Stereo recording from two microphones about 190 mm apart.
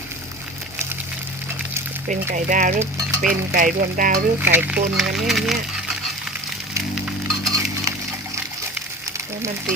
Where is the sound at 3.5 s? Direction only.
45° right (ahead or behind).